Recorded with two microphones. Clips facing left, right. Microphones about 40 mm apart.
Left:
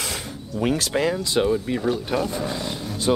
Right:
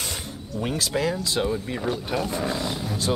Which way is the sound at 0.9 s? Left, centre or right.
Left.